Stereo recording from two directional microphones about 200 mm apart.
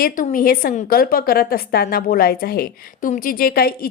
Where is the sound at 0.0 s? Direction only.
45° left (ahead or behind).